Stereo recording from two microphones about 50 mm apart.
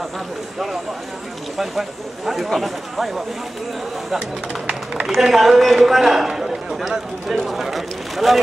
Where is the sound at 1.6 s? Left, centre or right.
Centre.